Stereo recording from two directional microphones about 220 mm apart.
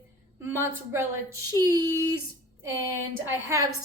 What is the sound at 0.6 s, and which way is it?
A woman's voice, 15° right (ahead or behind).